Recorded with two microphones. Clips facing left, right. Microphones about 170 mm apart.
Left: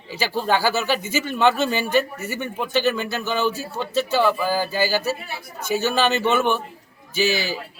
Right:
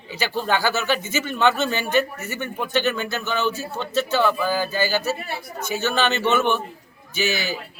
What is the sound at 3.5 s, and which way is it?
Speech, 35° left (ahead or behind).